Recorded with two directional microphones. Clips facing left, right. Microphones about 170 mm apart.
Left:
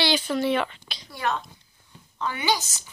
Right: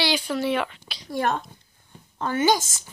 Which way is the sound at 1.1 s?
50° right (ahead or behind).